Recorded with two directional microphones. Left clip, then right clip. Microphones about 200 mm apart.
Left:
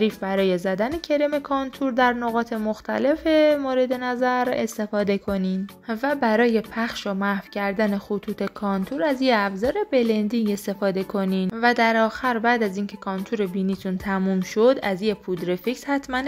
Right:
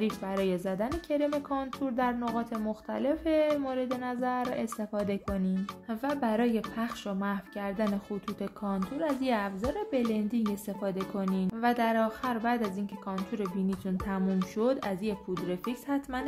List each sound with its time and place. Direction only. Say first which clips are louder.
0.0 s a woman's voice: left 9 dB; 30° left (ahead or behind)